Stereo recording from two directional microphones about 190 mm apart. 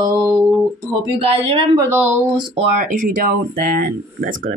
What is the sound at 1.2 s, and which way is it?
Speech, 30° right (ahead or behind).